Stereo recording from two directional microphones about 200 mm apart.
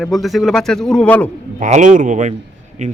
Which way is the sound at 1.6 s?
40° right (ahead or behind).